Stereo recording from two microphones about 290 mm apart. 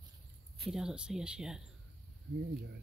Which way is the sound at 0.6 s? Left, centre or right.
Centre.